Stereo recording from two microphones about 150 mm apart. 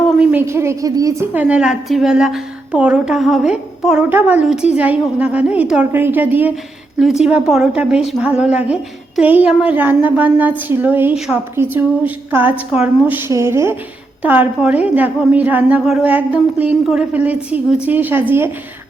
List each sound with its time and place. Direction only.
0.2 s a woman's voice: 10° right (ahead or behind)
1.3 s a woman's voice: 10° right (ahead or behind)